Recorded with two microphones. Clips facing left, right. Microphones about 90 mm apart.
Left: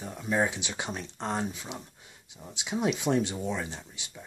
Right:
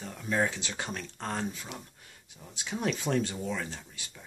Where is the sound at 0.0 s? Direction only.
20° left (ahead or behind).